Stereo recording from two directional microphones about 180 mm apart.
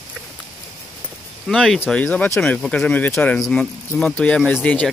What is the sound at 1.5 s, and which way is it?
Speech, 5° left (ahead or behind).